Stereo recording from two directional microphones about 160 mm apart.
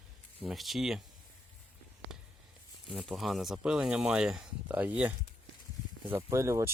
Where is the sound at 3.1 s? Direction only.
Centre (ahead or behind).